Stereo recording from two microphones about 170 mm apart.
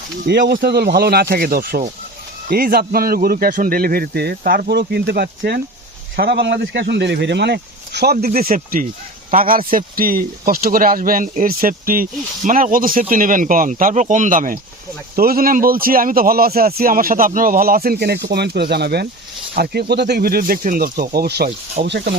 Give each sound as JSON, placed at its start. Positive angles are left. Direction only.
{"t": 0.3, "sound": "speech", "side_deg": -80}
{"t": 0.5, "sound": "a man's voice", "side_deg": -65}
{"t": 6.1, "sound": "a man's voice", "side_deg": -85}